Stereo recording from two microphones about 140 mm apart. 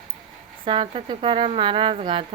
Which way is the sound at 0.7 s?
40° right (ahead or behind).